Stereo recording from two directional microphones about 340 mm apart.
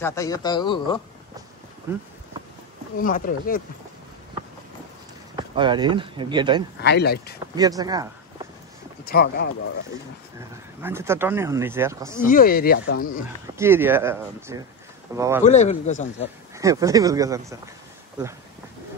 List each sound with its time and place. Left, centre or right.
0.0 s a man's voice: centre
1.9 s speech: centre
3.0 s speech: left
5.3 s speech: centre
6.8 s speech: left
7.5 s speech: centre
9.0 s speech: left
10.8 s speech: centre
12.3 s speech: left
13.6 s speech: centre
15.4 s speech: left
16.5 s speech: centre